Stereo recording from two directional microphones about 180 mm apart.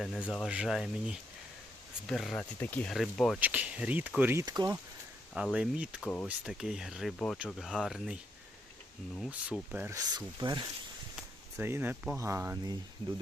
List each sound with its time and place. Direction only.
0.0 s speech: centre (ahead or behind); by 4.8 s 20° right (ahead or behind)
5.3 s speech: 5° right (ahead or behind)
9.7 s speech: 15° right (ahead or behind)
11.5 s speech: 10° right (ahead or behind)